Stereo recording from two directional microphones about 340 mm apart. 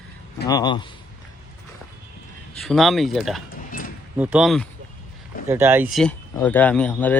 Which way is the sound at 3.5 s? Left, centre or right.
Left.